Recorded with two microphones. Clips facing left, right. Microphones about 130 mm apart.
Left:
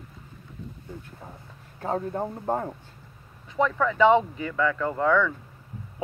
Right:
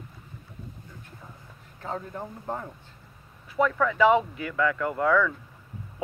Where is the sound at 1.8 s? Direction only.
40° left (ahead or behind).